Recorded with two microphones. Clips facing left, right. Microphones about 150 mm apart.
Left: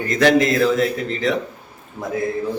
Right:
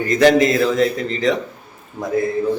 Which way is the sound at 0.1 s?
Centre (ahead or behind).